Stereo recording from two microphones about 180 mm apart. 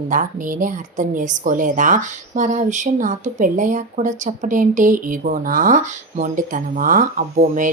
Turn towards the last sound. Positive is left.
turn(degrees=-45)  # may be behind; listen again after turning